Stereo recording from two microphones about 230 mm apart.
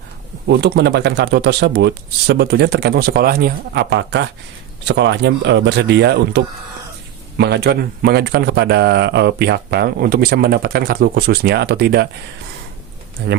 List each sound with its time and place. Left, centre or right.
0.4 s speech: right
13.2 s speech: right